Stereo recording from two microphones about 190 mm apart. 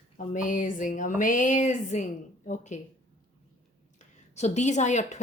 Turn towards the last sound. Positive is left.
turn(degrees=40)  # may be behind; listen again after turning